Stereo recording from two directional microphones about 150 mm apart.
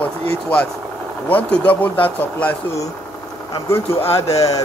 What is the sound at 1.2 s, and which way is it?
Speech, 10° left (ahead or behind).